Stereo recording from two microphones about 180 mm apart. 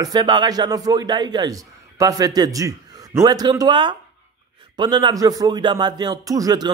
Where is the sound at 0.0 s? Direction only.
20° right (ahead or behind).